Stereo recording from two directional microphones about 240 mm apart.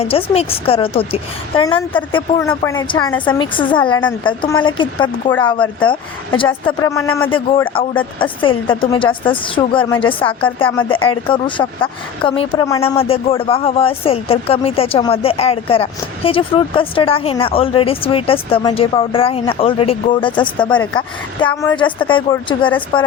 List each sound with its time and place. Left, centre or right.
0.0 s a woman's voice: left
7.3 s a woman's voice: left